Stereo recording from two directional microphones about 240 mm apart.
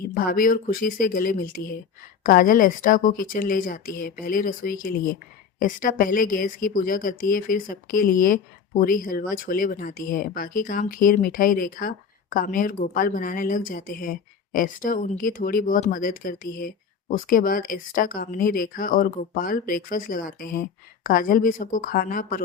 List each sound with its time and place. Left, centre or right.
0.1 s speech: left